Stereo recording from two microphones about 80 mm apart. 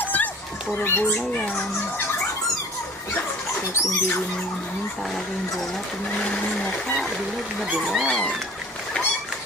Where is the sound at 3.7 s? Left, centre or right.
Left.